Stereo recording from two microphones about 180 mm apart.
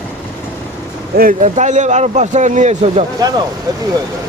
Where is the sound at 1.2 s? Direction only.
45° right (ahead or behind).